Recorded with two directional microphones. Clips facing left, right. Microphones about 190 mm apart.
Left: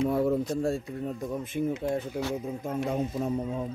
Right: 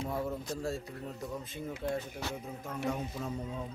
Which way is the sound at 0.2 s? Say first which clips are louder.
Left 10 dB; 60° left (ahead or behind).